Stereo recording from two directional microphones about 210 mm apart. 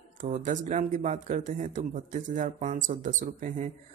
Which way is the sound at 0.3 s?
35° right (ahead or behind).